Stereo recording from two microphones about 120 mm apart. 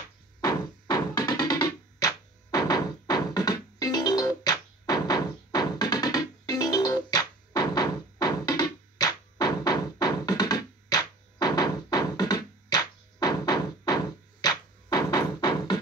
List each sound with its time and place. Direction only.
0.4 s music: 35° left (ahead or behind)